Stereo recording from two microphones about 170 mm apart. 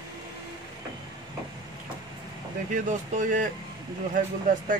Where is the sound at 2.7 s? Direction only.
50° right (ahead or behind).